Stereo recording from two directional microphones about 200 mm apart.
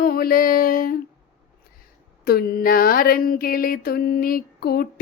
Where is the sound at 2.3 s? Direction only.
50° left (ahead or behind).